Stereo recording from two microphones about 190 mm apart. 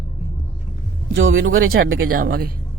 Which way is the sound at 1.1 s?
85° right.